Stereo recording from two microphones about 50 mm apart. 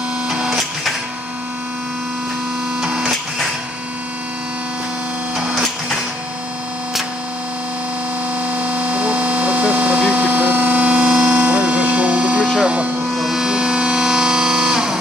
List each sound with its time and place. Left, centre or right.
0.3 s printer: centre
2.8 s printer: centre
5.3 s printer: centre
8.4 s a sound: right
13.1 s music: centre